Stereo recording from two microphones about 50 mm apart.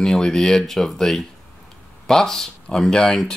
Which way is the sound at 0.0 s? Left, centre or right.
Centre.